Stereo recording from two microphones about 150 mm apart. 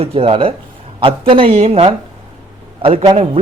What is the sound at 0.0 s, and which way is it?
A man's voice, 40° right (ahead or behind).